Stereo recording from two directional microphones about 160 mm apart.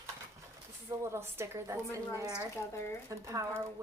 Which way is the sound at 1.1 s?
15° right (ahead or behind).